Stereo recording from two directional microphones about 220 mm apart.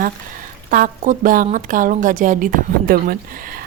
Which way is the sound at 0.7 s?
40° right (ahead or behind).